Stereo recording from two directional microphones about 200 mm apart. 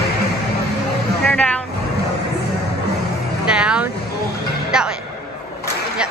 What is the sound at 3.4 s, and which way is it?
Vehicle, 5° right (ahead or behind).